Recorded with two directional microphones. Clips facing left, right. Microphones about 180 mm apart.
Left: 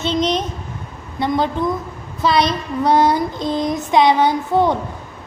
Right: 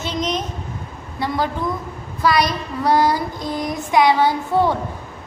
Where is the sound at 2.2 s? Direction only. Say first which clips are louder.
Left 1 dB; 25° left (ahead or behind).